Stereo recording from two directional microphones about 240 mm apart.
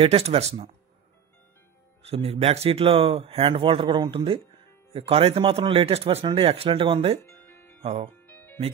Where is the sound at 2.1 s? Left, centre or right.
Right.